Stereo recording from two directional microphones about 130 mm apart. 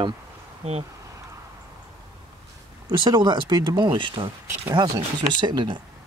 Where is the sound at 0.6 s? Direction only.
55° right (ahead or behind).